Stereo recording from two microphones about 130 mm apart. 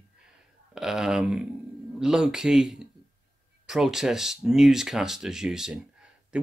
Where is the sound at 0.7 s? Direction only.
5° right (ahead or behind).